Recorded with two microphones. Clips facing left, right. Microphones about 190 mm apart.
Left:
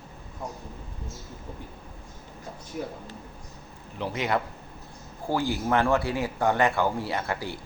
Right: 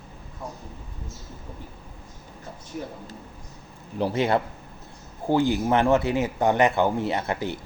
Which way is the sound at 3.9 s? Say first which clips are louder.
Right 5 dB; 35° right (ahead or behind).